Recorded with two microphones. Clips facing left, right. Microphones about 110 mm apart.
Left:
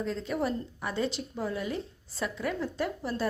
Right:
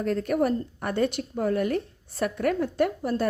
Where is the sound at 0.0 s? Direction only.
60° right (ahead or behind).